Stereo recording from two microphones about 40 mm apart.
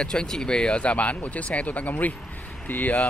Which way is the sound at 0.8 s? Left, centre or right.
Left.